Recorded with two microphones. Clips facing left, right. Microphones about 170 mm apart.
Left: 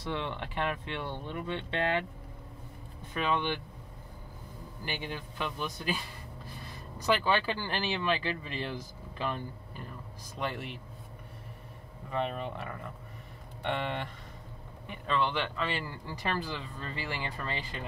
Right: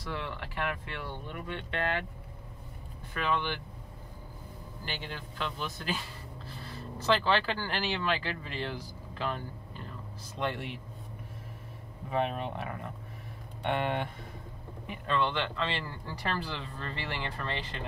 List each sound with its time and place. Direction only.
0.0 s speech: 20° left (ahead or behind)
3.2 s speech: 20° left (ahead or behind)
4.8 s speech: 15° left (ahead or behind)
10.5 s speech: centre (ahead or behind)
12.1 s speech: 5° right (ahead or behind); by 17.7 s 10° left (ahead or behind)